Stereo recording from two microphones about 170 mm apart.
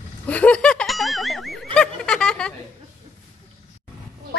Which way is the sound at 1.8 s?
5° left (ahead or behind).